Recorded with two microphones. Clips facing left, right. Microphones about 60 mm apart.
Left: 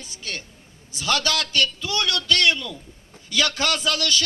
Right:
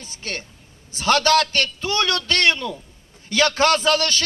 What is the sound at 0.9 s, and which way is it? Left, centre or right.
A man's voice, right.